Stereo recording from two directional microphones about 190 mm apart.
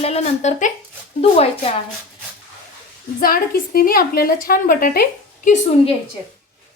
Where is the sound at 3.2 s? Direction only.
50° left (ahead or behind).